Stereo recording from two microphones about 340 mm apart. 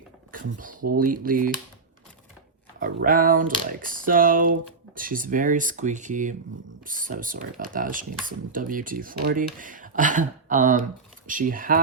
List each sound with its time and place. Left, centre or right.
0.3 s speech: right
2.8 s speech: right